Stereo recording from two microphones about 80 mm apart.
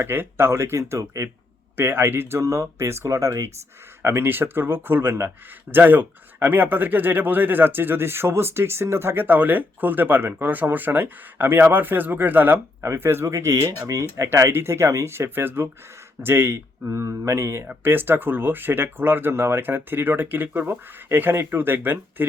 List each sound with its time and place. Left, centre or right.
0.0 s speech: right
1.7 s speech: right
4.0 s speech: right
13.9 s speech: right